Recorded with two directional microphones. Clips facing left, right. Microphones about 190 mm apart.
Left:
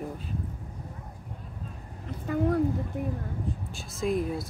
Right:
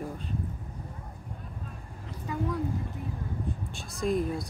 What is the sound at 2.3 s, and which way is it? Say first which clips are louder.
Speech: left 5 dB; 55° left (ahead or behind).